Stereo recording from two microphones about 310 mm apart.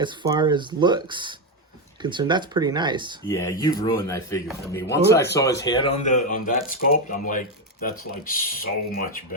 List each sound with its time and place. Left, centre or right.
0.0 s speech: centre
3.2 s speech: centre; by 9.2 s left